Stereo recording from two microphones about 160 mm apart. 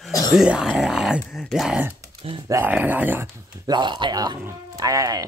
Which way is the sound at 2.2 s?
35° right (ahead or behind).